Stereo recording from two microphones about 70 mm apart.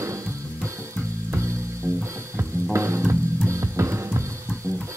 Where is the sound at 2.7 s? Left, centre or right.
Right.